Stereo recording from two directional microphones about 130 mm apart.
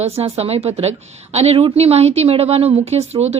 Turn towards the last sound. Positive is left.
turn(degrees=-55)  # may be behind; listen again after turning